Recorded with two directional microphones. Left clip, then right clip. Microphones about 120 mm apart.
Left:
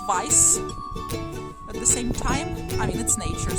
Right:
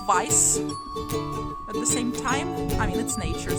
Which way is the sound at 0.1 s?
25° right (ahead or behind).